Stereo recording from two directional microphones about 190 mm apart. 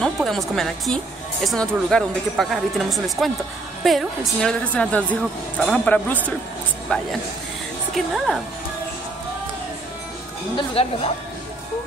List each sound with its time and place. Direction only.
0.0 s a man's voice: centre (ahead or behind)
10.5 s a woman's voice: 30° left (ahead or behind)